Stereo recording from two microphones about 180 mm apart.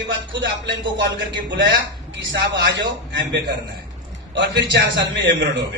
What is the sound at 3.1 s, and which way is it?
A man's voice, 75° right (ahead or behind).